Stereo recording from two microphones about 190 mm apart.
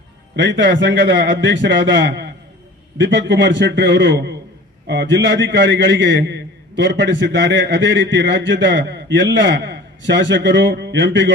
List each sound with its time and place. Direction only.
0.3 s a man's voice: 70° right (ahead or behind)